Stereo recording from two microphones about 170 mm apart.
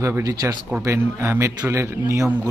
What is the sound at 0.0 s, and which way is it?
Speech, 15° right (ahead or behind).